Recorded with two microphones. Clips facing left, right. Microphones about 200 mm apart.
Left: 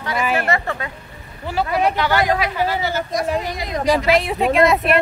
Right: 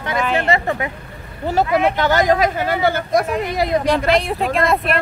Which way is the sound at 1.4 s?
45° right (ahead or behind).